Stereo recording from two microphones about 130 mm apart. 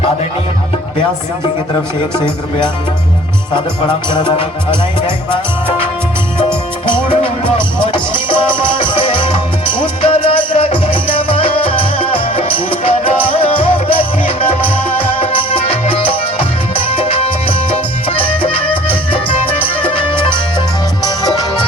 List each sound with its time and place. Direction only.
3.5 s music: 40° left (ahead or behind)
6.8 s music: 40° left (ahead or behind)
21.0 s music: 30° left (ahead or behind)